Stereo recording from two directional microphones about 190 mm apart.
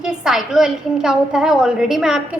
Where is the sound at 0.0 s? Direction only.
Centre (ahead or behind).